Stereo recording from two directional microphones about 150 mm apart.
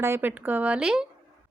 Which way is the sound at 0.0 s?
15° right (ahead or behind).